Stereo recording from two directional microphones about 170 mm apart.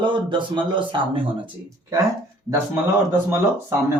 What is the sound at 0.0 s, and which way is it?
Speech, 30° right (ahead or behind).